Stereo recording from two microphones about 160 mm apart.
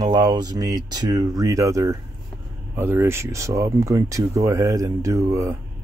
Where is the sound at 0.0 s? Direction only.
25° right (ahead or behind).